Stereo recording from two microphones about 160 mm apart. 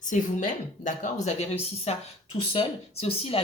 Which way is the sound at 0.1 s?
50° left (ahead or behind).